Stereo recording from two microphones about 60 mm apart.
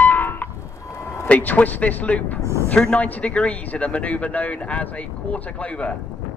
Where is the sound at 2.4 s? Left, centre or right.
Right.